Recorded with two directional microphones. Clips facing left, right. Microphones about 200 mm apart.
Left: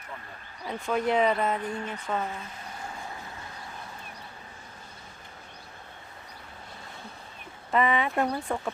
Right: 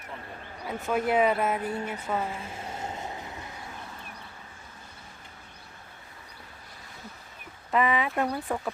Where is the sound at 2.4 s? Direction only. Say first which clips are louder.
Right 4 dB; 25° right (ahead or behind).